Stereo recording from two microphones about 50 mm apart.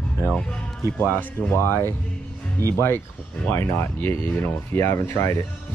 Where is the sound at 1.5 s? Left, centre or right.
Left.